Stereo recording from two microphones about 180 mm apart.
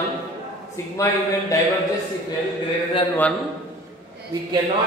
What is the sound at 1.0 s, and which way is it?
Speech, 15° left (ahead or behind).